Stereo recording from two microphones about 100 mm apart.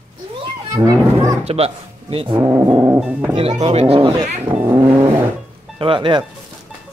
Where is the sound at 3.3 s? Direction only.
85° right.